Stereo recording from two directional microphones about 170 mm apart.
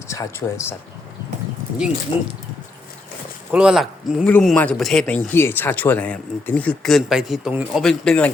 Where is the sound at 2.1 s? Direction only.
15° right (ahead or behind).